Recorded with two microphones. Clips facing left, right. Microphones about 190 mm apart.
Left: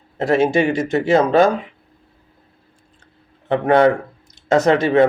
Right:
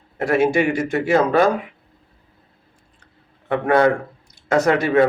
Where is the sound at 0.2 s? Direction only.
25° left (ahead or behind).